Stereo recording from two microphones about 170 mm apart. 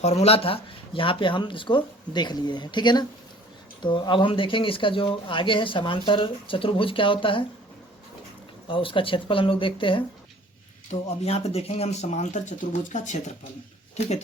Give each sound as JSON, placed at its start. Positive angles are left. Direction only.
{"t": 0.0, "sound": "speech", "side_deg": 40}
{"t": 8.6, "sound": "speech", "side_deg": 30}